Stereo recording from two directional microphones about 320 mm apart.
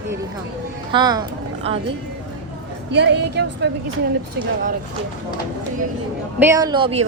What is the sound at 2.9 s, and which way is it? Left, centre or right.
Speech, right.